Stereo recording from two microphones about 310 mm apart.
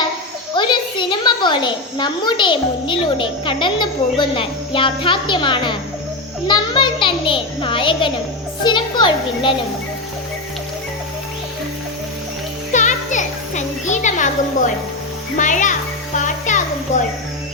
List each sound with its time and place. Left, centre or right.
0.5 s a child's voice: centre
12.7 s music: left
15.4 s a child's voice: left
16.1 s a sound: left